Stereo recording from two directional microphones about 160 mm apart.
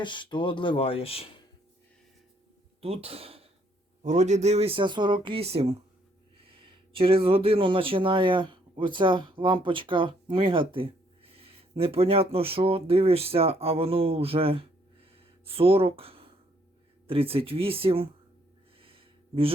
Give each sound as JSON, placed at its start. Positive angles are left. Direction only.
{"t": 0.0, "sound": "speech", "side_deg": 30}
{"t": 2.8, "sound": "speech", "side_deg": -40}
{"t": 18.8, "sound": "a sound", "side_deg": -35}